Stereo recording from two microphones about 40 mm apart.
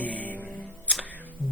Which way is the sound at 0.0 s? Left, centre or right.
Left.